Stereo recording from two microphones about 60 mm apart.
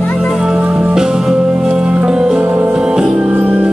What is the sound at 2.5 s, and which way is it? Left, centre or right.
Music, right.